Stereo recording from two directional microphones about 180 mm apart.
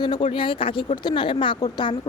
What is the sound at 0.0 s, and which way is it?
Speech, 25° left (ahead or behind).